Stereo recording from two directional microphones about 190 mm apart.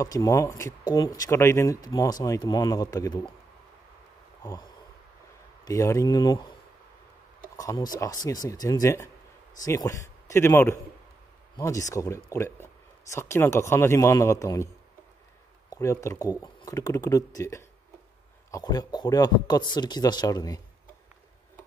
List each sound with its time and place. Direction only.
0.0 s a man's voice: 15° left (ahead or behind)
4.4 s a sound: 20° left (ahead or behind)
5.7 s a man's voice: 15° left (ahead or behind)
7.5 s a man's voice: 20° left (ahead or behind)
15.7 s a man's voice: 15° left (ahead or behind)